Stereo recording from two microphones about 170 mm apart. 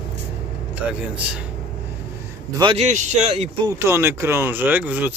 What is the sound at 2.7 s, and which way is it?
Speech, 45° right (ahead or behind).